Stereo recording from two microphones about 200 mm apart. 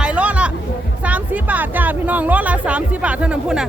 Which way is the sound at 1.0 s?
5° right (ahead or behind).